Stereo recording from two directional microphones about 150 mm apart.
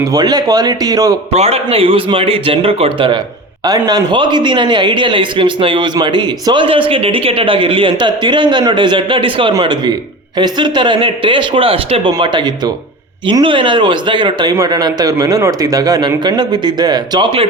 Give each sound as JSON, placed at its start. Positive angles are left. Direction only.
{"t": 0.1, "sound": "a man's voice", "side_deg": -25}
{"t": 1.3, "sound": "a man's voice", "side_deg": -45}